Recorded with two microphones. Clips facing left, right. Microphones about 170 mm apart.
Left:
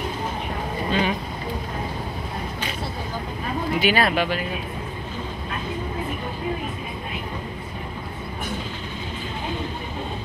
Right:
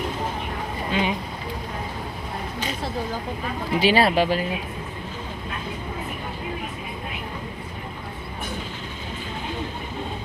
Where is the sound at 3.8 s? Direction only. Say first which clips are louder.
Right 3 dB; 30° right (ahead or behind).